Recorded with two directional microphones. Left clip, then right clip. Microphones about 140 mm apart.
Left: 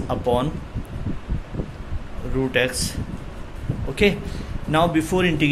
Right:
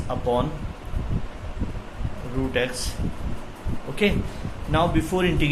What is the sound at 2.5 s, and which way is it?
Speech, 55° left (ahead or behind).